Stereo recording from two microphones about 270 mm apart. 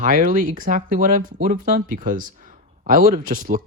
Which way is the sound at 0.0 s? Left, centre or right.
Right.